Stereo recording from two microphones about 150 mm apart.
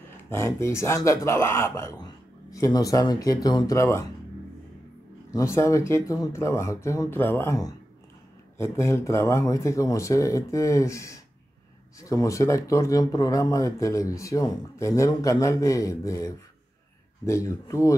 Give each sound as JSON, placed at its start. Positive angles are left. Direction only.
{"t": 0.3, "sound": "speech", "side_deg": 20}
{"t": 5.3, "sound": "speech", "side_deg": 20}
{"t": 17.2, "sound": "speech", "side_deg": 20}